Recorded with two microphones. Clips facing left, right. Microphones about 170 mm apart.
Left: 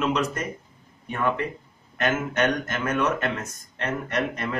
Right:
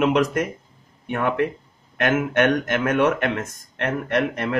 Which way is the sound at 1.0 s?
65° right (ahead or behind).